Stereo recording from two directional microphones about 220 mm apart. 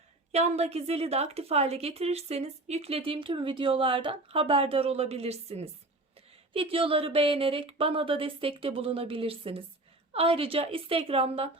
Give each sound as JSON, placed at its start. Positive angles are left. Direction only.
{"t": 0.3, "sound": "a woman's voice", "side_deg": -30}